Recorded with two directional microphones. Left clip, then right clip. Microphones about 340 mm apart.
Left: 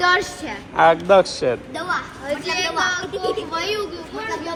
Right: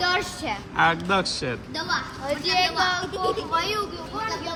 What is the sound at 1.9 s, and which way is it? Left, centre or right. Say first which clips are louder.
A child's voice: left 3 dB; right.